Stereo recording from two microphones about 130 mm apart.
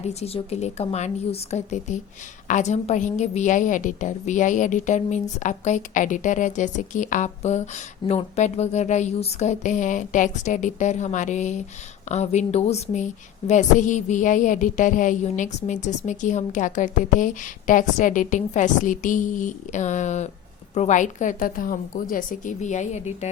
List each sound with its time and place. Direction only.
0.0 s a woman's voice: 55° left (ahead or behind)
13.5 s a woman's voice: 70° left (ahead or behind)